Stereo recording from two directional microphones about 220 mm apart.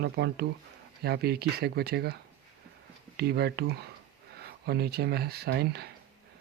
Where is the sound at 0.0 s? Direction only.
50° right (ahead or behind).